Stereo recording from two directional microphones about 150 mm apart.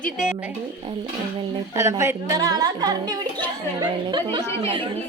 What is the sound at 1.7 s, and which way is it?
Speech, 20° right (ahead or behind).